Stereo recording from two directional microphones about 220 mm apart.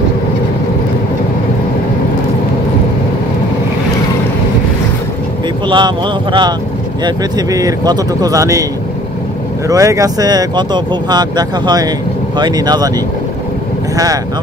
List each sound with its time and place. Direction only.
5.7 s speech: 20° right (ahead or behind)
9.7 s speech: 15° right (ahead or behind)